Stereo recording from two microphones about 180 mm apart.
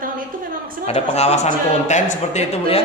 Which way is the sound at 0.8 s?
35° left (ahead or behind).